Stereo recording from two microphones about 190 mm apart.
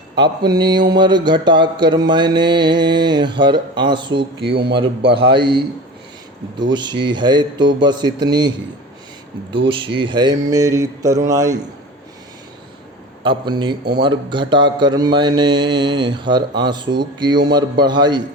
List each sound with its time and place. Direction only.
0.2 s mantra: 20° right (ahead or behind)
13.2 s mantra: 25° right (ahead or behind)